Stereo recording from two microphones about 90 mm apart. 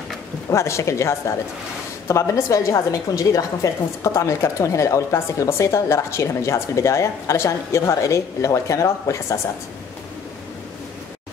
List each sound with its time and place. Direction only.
0.5 s speech: 35° left (ahead or behind)